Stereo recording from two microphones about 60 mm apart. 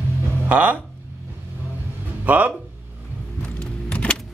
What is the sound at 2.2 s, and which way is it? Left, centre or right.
Speech, right.